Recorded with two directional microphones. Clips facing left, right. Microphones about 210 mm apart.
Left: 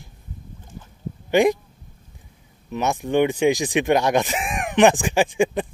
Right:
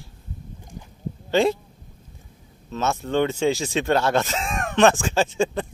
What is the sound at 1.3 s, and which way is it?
Speech, 15° left (ahead or behind).